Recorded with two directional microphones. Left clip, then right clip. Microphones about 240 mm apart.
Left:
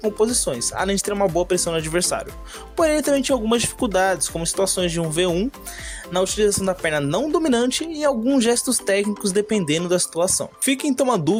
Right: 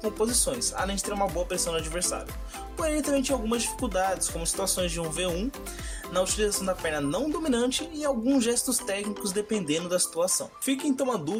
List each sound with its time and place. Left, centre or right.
0.2 s speech: left